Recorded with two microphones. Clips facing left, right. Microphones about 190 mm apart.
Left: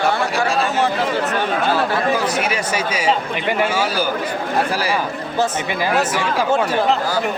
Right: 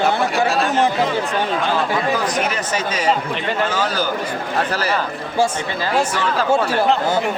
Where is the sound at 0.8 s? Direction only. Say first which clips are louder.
Right 1 dB; 15° right (ahead or behind).